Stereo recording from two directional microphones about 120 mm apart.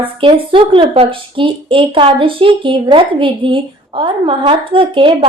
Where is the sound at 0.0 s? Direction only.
50° right (ahead or behind).